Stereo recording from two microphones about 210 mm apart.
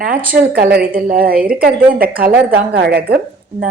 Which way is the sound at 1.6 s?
45° right (ahead or behind).